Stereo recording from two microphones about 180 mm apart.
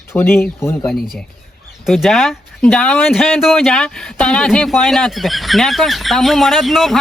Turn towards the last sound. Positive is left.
turn(degrees=0)  # may be behind; listen again after turning